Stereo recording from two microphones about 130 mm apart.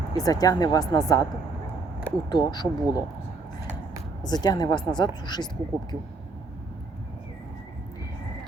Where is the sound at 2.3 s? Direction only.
35° left (ahead or behind).